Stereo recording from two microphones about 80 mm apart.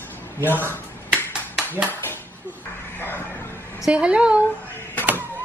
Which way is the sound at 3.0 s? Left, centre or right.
Left.